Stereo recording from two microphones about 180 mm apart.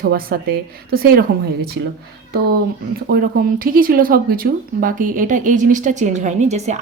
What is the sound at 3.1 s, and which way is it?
Speech, 55° right (ahead or behind).